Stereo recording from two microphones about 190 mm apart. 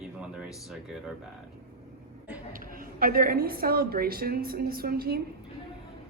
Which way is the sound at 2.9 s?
50° right (ahead or behind).